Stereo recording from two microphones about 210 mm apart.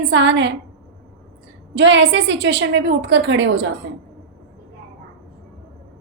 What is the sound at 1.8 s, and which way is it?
A woman's voice, 55° right (ahead or behind).